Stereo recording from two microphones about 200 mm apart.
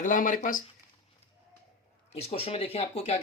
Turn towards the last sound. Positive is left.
turn(degrees=30)  # may be behind; listen again after turning